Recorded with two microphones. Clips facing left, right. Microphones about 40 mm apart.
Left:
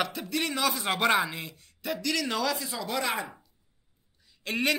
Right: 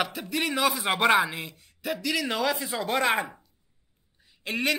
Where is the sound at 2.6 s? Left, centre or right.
Right.